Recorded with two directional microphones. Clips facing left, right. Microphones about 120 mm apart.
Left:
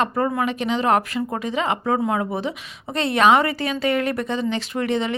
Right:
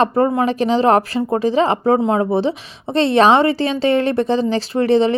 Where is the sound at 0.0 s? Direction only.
30° right (ahead or behind).